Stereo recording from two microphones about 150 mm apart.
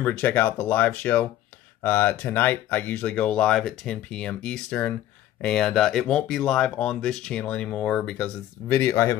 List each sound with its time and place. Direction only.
0.0 s speech: 10° left (ahead or behind)
8.6 s speech: 15° left (ahead or behind)